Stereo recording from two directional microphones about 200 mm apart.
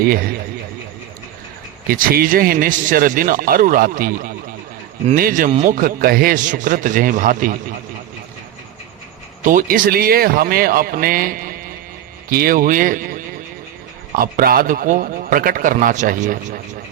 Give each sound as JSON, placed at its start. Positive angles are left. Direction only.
{"t": 1.9, "sound": "a man's voice", "side_deg": -45}
{"t": 9.4, "sound": "a man's voice", "side_deg": -40}
{"t": 14.2, "sound": "a man's voice", "side_deg": -45}